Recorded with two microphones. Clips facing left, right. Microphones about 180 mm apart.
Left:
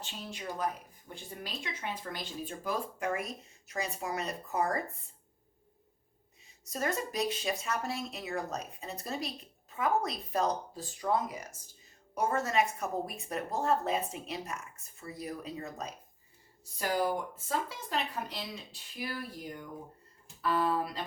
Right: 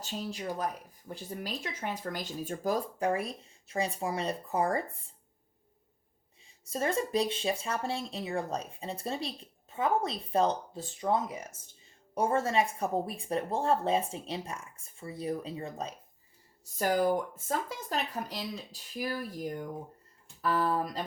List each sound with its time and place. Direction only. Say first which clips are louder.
0.0 s speech: right 5 dB; 40° right (ahead or behind)
6.4 s speech: right 3 dB; 30° right (ahead or behind)
16.7 s speech: right 4 dB; 45° right (ahead or behind)